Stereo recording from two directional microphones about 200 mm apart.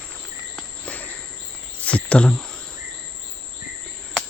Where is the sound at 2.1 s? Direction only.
5° left (ahead or behind).